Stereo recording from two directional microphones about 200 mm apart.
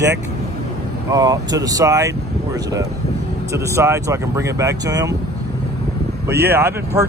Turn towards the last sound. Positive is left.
turn(degrees=-10)  # may be behind; listen again after turning